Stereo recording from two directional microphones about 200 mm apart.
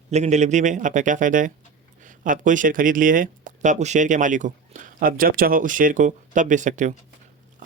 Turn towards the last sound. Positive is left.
turn(degrees=-40)  # may be behind; listen again after turning